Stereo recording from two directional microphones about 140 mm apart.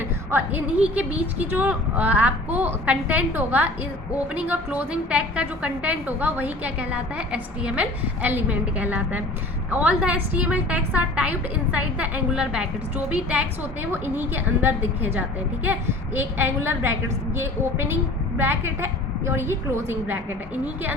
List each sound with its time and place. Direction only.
0.3 s speech: 15° right (ahead or behind)
13.9 s speech: 15° right (ahead or behind)